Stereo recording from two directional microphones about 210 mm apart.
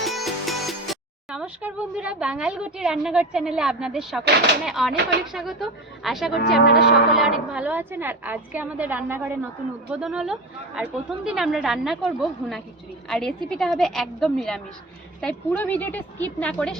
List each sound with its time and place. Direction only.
0.0 s a woman's voice: centre (ahead or behind)
6.3 s speech: 50° left (ahead or behind)
7.1 s a woman's voice: centre (ahead or behind)